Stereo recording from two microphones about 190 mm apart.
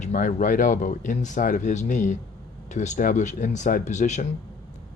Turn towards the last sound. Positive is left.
turn(degrees=40)  # may be behind; listen again after turning